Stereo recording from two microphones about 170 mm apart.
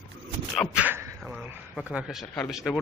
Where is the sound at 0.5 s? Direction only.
5° right (ahead or behind).